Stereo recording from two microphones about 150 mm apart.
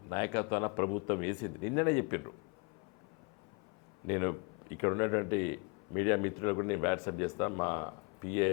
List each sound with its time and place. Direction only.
0.1 s speech: 20° left (ahead or behind)
4.0 s speech: 20° left (ahead or behind)